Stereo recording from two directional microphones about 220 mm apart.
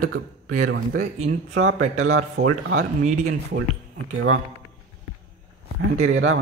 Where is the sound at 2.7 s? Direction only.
35° right (ahead or behind).